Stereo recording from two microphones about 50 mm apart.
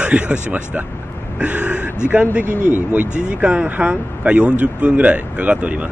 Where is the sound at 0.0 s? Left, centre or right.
Right.